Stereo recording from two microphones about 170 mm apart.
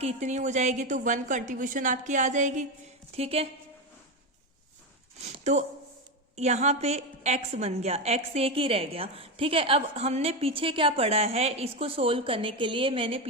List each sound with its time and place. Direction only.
0.0 s a woman's voice: 40° right (ahead or behind)
5.2 s a woman's voice: 45° right (ahead or behind)